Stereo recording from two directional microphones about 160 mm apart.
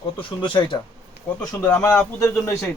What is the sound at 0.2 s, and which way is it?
Speech, 30° left (ahead or behind).